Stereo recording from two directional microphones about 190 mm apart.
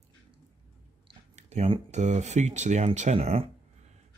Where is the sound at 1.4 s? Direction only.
35° right (ahead or behind).